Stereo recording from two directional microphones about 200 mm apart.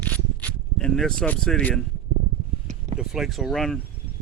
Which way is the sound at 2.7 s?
35° right (ahead or behind).